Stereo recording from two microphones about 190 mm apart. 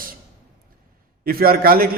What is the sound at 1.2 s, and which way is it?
Speech, 50° right (ahead or behind).